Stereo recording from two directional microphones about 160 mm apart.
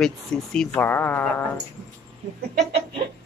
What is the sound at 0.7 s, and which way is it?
Speech, 15° left (ahead or behind).